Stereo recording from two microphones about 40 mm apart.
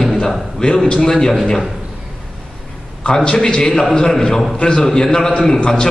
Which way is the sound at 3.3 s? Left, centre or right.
Centre.